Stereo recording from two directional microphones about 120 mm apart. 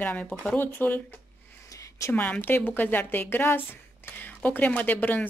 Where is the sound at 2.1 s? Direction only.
15° left (ahead or behind).